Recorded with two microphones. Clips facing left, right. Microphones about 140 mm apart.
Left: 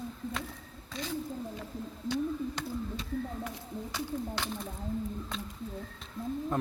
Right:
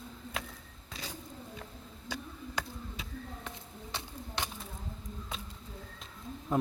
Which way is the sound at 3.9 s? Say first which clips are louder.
Left 7 dB; 25° right (ahead or behind).